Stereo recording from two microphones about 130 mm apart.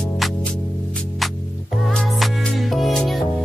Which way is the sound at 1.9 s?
Centre (ahead or behind).